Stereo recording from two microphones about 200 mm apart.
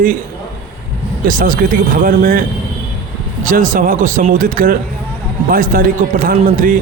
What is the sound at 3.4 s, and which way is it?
Speech, 40° right (ahead or behind).